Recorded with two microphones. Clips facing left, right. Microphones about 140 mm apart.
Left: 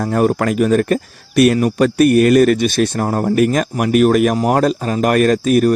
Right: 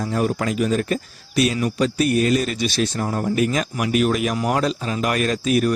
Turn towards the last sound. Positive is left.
turn(degrees=45)  # may be behind; listen again after turning